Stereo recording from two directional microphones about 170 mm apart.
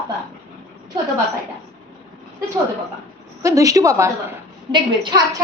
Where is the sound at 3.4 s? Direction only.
20° right (ahead or behind).